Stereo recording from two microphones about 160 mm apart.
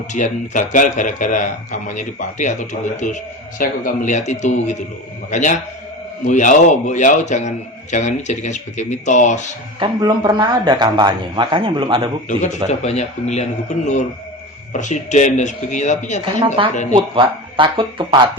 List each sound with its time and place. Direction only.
0.1 s a man's voice: 50° left (ahead or behind)
9.8 s speech: 25° right (ahead or behind)
12.8 s a man's voice: 40° left (ahead or behind)
16.6 s speech: 35° right (ahead or behind)